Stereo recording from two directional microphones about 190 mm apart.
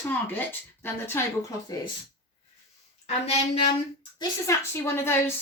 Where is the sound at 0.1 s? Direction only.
10° left (ahead or behind).